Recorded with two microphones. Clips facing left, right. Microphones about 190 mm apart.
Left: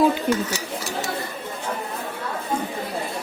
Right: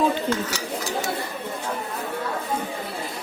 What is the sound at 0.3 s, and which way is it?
Speech, 15° left (ahead or behind).